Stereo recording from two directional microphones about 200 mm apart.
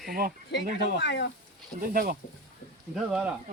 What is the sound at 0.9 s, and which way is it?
Speech, 60° left (ahead or behind).